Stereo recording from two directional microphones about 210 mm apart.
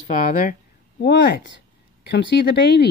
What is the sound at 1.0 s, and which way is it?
Speech, 60° left (ahead or behind).